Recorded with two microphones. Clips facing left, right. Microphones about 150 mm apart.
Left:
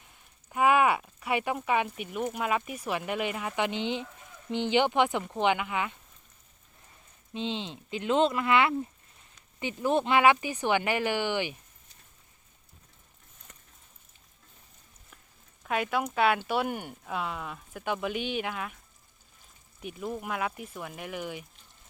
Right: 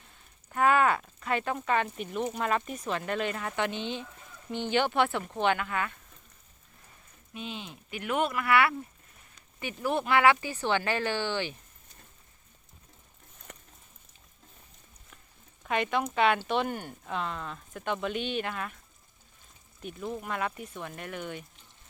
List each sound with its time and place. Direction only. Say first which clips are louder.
0.5 s speech: left 1 dB; 15° left (ahead or behind)
7.3 s speech: left 6 dB; 25° left (ahead or behind)
13.5 s a sound: right 9 dB; 80° right
15.6 s speech: even; 5° left (ahead or behind)
19.8 s speech: left 1 dB; 10° left (ahead or behind)